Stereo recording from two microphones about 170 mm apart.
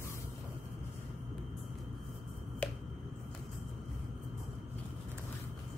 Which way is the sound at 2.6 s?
10° left (ahead or behind).